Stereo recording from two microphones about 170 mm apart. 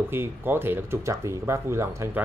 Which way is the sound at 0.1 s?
15° right (ahead or behind).